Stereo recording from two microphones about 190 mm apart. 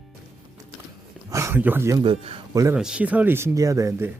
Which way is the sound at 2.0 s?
25° right (ahead or behind).